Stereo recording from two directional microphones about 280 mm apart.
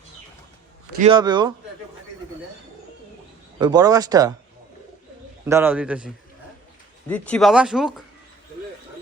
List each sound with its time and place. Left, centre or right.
0.9 s speech: centre
3.6 s speech: centre
5.5 s speech: centre
7.1 s speech: centre